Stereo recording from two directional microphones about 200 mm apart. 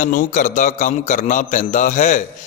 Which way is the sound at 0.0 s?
40° left (ahead or behind).